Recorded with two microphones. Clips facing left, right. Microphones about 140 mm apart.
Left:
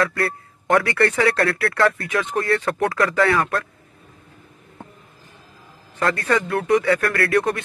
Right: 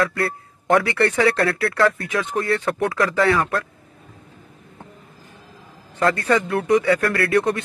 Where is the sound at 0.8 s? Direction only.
15° right (ahead or behind).